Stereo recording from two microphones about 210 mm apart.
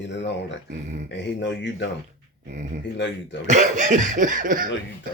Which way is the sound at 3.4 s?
35° right (ahead or behind).